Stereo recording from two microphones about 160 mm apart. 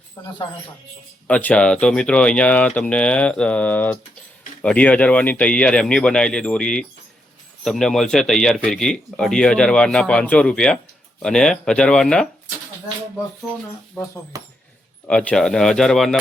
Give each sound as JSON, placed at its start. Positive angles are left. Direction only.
{"t": 0.2, "sound": "speech", "side_deg": 25}
{"t": 1.3, "sound": "speech", "side_deg": 10}
{"t": 15.0, "sound": "speech", "side_deg": 5}